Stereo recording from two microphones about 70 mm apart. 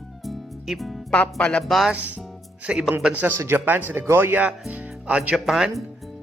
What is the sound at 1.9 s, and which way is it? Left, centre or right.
Speech, centre.